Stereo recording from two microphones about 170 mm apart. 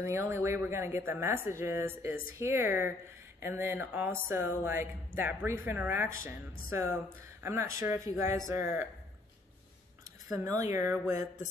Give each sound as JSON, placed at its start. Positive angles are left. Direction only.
{"t": 0.0, "sound": "speech", "side_deg": -15}
{"t": 10.3, "sound": "speech", "side_deg": -20}